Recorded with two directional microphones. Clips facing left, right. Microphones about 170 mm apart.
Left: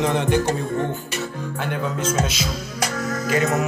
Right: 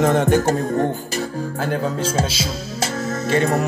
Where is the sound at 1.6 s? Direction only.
35° right (ahead or behind).